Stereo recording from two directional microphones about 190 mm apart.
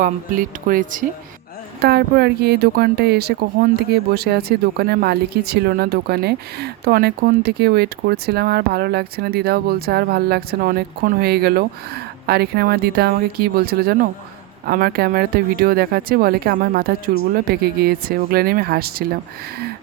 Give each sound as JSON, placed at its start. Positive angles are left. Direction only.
{"t": 0.0, "sound": "speech", "side_deg": -45}
{"t": 1.8, "sound": "speech", "side_deg": -55}